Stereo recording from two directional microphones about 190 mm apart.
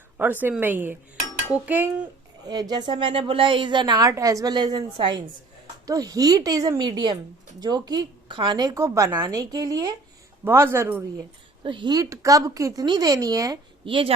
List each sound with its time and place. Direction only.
0.2 s a woman's voice: 10° right (ahead or behind)
2.5 s a woman's voice: 20° right (ahead or behind)
11.6 s a woman's voice: 25° right (ahead or behind)